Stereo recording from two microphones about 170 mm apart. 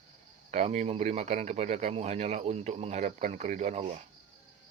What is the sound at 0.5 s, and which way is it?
Speech, 40° right (ahead or behind).